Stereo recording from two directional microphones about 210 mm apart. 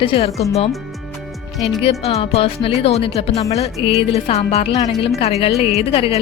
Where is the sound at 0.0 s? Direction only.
25° left (ahead or behind).